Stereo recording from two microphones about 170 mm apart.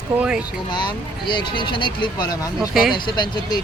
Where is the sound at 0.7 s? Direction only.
25° left (ahead or behind).